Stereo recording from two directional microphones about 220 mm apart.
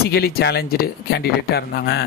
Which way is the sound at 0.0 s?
45° left (ahead or behind).